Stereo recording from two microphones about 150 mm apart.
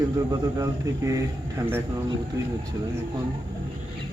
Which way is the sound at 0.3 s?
20° right (ahead or behind).